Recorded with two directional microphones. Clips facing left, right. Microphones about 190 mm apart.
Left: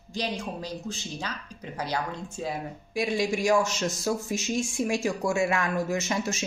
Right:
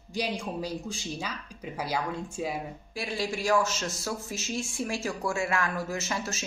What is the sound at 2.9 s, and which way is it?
A woman's voice, 15° left (ahead or behind).